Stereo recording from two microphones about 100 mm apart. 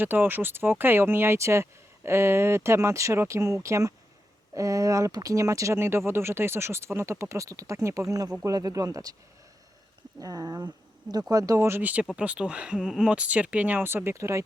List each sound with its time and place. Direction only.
0.0 s speech: 20° right (ahead or behind); by 9.1 s 35° right (ahead or behind)
10.2 s speech: 40° right (ahead or behind)
11.8 s speech: 15° right (ahead or behind)